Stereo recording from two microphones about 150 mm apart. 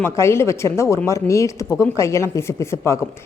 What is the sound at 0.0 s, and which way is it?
Speech, 15° left (ahead or behind).